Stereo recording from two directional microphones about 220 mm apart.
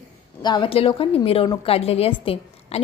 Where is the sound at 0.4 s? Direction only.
20° left (ahead or behind).